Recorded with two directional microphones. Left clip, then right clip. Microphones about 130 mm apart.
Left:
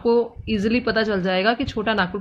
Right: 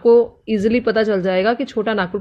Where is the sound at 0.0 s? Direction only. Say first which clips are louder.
Right 7 dB; 40° right (ahead or behind).